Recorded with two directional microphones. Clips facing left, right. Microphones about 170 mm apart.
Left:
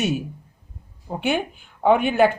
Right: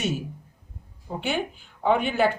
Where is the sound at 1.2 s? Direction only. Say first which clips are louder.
Left 5 dB; 55° left (ahead or behind).